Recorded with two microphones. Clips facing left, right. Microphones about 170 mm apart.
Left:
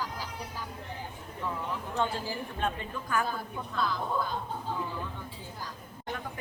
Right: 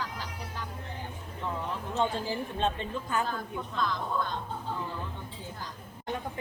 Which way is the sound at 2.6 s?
25° right (ahead or behind).